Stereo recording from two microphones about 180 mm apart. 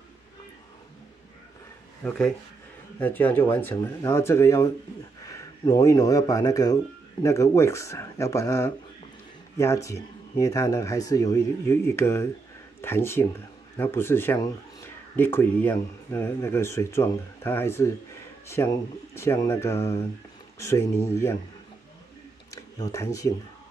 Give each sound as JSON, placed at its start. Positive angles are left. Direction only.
{"t": 2.0, "sound": "speech", "side_deg": 5}
{"t": 22.5, "sound": "speech", "side_deg": 20}